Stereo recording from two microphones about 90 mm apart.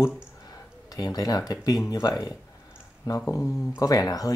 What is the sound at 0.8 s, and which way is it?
Speech, 45° left (ahead or behind).